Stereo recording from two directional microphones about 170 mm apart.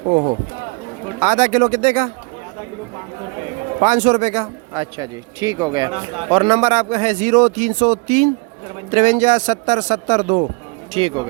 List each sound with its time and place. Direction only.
1.2 s a man's voice: 45° right (ahead or behind)
3.8 s a man's voice: 45° right (ahead or behind)
5.4 s speech: 20° right (ahead or behind)
5.9 s a man's voice: 35° right (ahead or behind)
10.9 s speech: 30° right (ahead or behind)